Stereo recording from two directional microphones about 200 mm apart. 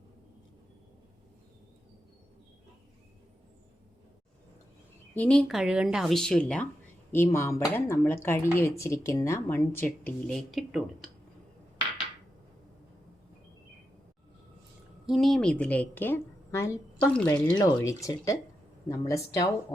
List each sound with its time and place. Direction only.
5.1 s speech: 5° left (ahead or behind)
15.0 s speech: centre (ahead or behind); by 19.5 s 15° left (ahead or behind)